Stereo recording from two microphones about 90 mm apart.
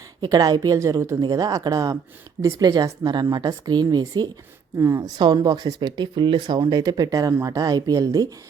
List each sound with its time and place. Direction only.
0.2 s speech: 45° right (ahead or behind)
4.8 s a woman's voice: 35° right (ahead or behind)
5.1 s speech: 50° right (ahead or behind)